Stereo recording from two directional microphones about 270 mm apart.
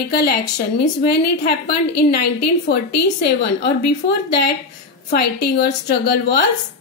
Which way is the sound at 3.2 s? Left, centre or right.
Left.